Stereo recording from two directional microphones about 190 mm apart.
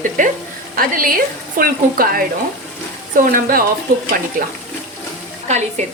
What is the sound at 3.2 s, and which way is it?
A woman's voice, 50° right (ahead or behind).